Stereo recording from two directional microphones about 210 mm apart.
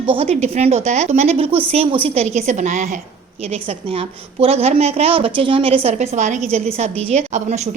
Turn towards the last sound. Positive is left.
turn(degrees=-30)  # may be behind; listen again after turning